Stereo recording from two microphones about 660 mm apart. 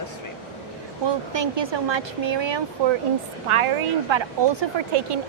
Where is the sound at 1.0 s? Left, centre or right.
Right.